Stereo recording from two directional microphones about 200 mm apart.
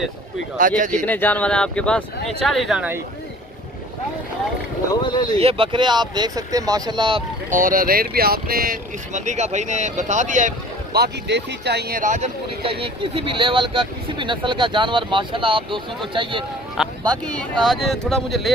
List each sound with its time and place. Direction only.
0.6 s speech: 40° right (ahead or behind)
1.0 s speech: 10° left (ahead or behind)
5.0 s speech: 20° left (ahead or behind)
5.4 s speech: 25° right (ahead or behind)
7.5 s speech: 45° right (ahead or behind)
10.9 s speech: 55° right (ahead or behind); by 12.7 s 35° right (ahead or behind)
12.8 s speech: 25° right (ahead or behind)
16.8 s a sound: centre (ahead or behind)
17.2 s speech: centre (ahead or behind)